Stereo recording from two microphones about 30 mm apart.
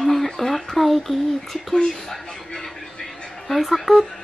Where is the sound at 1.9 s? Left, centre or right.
Centre.